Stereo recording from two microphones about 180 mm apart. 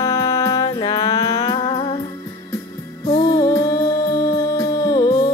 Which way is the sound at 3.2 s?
20° left (ahead or behind).